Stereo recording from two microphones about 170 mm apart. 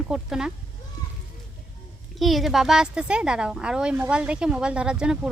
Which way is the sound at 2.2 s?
Centre (ahead or behind).